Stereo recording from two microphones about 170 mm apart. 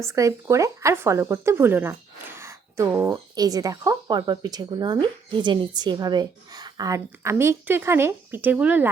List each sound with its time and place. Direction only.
0.0 s a woman's voice: 15° right (ahead or behind)